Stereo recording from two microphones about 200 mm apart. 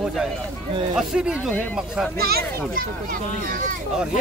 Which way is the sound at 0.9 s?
5° right (ahead or behind).